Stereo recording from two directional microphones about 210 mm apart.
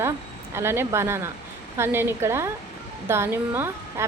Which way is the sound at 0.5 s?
10° right (ahead or behind).